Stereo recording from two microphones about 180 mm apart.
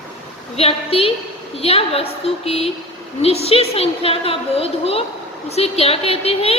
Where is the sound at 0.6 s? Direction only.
30° left (ahead or behind).